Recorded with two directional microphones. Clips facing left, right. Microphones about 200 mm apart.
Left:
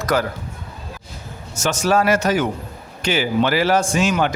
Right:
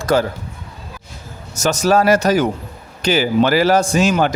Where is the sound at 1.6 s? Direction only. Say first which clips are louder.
Right 3 dB; 40° right (ahead or behind).